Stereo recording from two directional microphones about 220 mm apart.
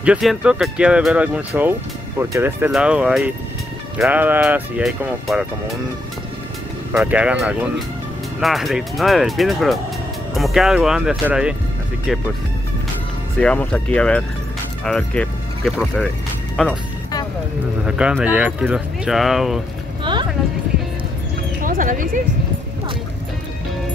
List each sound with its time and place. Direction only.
0.0 s speech: 5° right (ahead or behind)
7.0 s speech: 5° right (ahead or behind)
13.4 s speech: 5° left (ahead or behind)
17.8 s speech: 5° right (ahead or behind)
20.0 s music: 20° right (ahead or behind)
21.6 s speech: 40° right (ahead or behind)